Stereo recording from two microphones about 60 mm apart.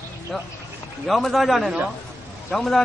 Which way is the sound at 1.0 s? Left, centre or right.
Centre.